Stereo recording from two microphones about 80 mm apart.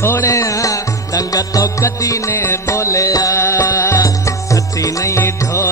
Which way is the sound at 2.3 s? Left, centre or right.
Left.